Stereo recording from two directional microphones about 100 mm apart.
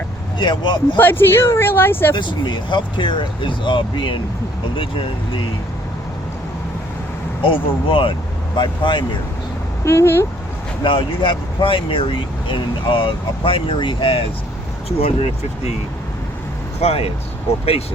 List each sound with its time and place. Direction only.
0.3 s speech: 50° left (ahead or behind)
0.9 s speech: 20° left (ahead or behind)
2.1 s speech: 55° left (ahead or behind)
7.4 s speech: 60° left (ahead or behind)
9.8 s speech: 25° left (ahead or behind)
10.8 s speech: 60° left (ahead or behind)
14.8 s speech: 85° left
16.8 s speech: 80° left